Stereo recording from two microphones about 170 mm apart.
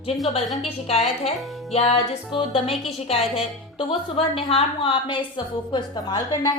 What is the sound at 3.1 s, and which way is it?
A woman's voice, 35° left (ahead or behind).